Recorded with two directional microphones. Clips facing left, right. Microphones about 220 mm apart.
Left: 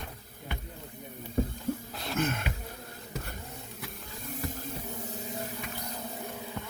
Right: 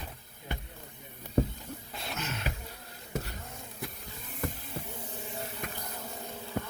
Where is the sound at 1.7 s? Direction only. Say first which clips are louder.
Left 11 dB; 50° left (ahead or behind).